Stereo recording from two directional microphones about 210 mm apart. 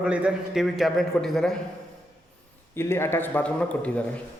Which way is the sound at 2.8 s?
10° left (ahead or behind).